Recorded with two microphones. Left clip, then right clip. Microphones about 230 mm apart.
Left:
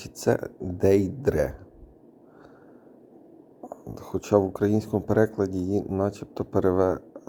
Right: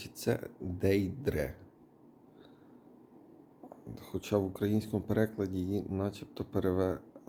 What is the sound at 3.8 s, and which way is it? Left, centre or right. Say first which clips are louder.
Speech: left 10 dB; centre.